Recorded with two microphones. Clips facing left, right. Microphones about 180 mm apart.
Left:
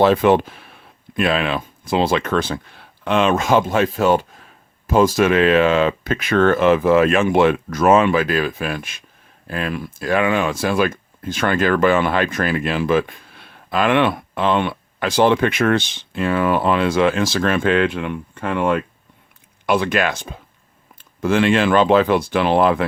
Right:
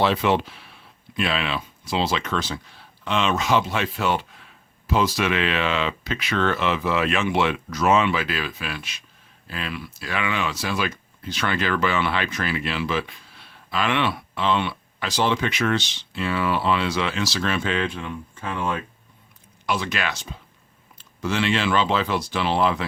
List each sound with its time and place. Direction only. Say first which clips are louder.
0.0 s speech: left 7 dB; 50° left (ahead or behind)